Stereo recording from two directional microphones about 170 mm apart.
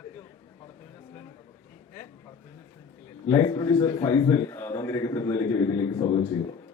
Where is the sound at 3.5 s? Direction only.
20° left (ahead or behind).